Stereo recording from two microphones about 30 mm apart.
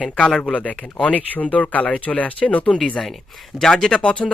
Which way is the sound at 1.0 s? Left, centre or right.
Left.